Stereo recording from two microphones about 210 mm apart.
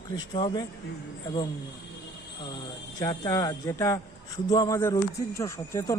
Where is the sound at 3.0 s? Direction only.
15° left (ahead or behind).